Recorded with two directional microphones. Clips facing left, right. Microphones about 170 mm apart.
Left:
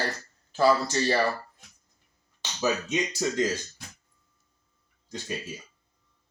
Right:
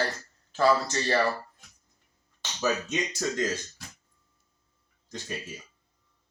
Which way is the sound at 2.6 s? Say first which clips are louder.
Left 1 dB; 5° left (ahead or behind).